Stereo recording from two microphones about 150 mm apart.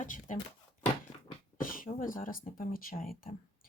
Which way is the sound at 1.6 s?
65° left (ahead or behind).